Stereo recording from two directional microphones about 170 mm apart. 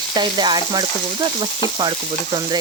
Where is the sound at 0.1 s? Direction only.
25° right (ahead or behind).